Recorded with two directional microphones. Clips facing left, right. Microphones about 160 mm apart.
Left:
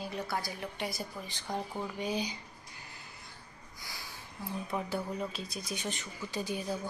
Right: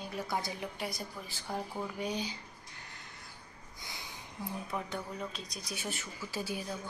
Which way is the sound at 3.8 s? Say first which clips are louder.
Even; 20° right (ahead or behind).